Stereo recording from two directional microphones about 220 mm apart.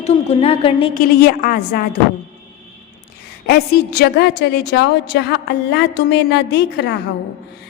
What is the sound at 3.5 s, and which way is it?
A woman's voice, 50° left (ahead or behind).